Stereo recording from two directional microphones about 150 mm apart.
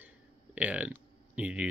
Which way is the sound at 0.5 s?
10° right (ahead or behind).